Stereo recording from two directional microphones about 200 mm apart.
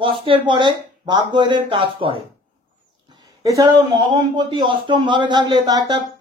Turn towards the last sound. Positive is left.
turn(degrees=-20)  # may be behind; listen again after turning